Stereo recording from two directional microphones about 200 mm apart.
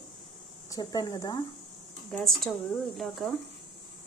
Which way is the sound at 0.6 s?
20° left (ahead or behind).